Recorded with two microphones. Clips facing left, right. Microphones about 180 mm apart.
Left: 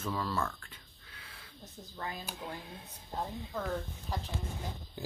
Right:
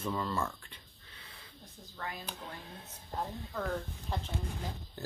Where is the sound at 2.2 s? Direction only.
10° left (ahead or behind).